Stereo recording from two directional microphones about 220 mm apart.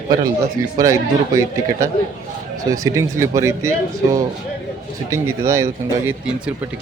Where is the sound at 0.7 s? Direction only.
15° right (ahead or behind).